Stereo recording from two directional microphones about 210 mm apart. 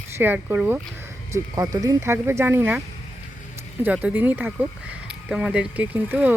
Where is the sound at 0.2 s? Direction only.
10° right (ahead or behind).